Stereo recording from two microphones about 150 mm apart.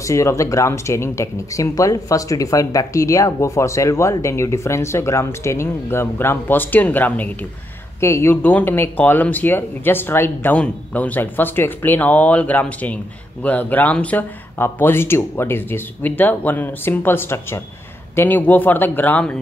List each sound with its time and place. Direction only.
0.0 s speech: 20° left (ahead or behind)